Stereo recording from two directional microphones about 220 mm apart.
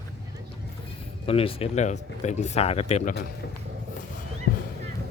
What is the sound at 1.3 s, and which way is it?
Speech, 25° left (ahead or behind).